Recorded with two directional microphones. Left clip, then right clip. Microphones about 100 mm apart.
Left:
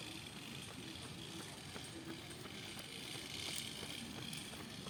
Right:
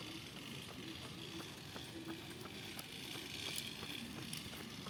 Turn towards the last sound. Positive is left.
turn(degrees=35)  # may be behind; listen again after turning